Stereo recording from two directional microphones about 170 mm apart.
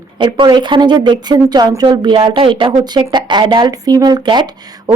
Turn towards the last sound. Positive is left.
turn(degrees=-25)  # may be behind; listen again after turning